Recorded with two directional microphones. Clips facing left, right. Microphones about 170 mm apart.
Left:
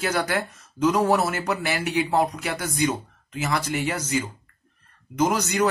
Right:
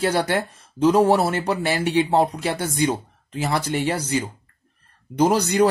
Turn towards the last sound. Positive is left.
turn(degrees=-30)  # may be behind; listen again after turning